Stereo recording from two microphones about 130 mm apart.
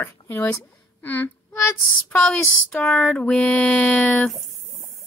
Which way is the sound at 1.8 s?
10° left (ahead or behind).